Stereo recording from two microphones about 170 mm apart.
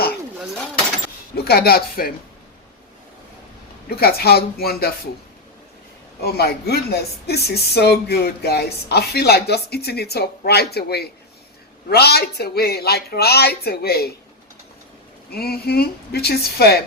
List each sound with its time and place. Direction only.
1.5 s speech: 70° left (ahead or behind)
3.8 s speech: 65° left (ahead or behind)
6.2 s speech: 70° left (ahead or behind)
15.3 s speech: 65° left (ahead or behind)